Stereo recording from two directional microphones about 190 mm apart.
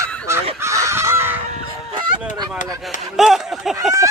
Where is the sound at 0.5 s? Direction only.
15° right (ahead or behind).